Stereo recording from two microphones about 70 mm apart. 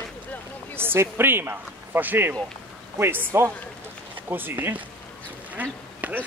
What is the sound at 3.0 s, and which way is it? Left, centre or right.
Speech, right.